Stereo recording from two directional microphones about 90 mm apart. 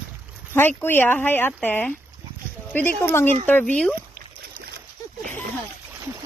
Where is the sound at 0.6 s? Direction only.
25° left (ahead or behind).